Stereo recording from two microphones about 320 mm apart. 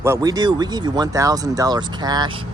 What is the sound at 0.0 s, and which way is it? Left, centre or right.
Speech, centre.